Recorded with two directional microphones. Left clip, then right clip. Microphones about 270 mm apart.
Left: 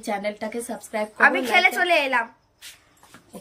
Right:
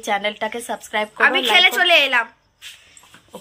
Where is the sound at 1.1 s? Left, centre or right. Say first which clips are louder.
Right 3 dB; centre.